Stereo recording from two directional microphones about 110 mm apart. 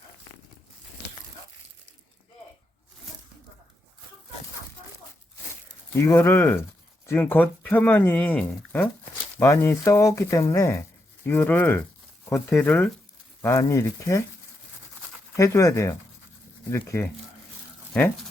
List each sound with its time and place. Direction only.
6.0 s speech: 25° left (ahead or behind)
13.4 s speech: 25° left (ahead or behind)
15.4 s speech: 30° left (ahead or behind)
17.9 s speech: 10° left (ahead or behind)